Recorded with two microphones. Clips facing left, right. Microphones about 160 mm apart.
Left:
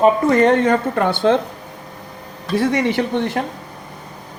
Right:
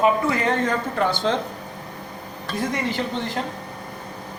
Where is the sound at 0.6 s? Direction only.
60° left (ahead or behind).